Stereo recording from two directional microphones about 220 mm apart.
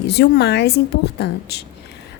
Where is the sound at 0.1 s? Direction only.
50° left (ahead or behind).